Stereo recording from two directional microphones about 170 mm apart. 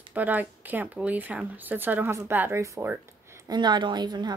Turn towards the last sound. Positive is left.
turn(degrees=-25)  # may be behind; listen again after turning